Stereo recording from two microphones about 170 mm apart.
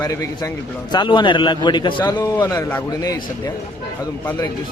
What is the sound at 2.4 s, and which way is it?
Speech, 15° left (ahead or behind).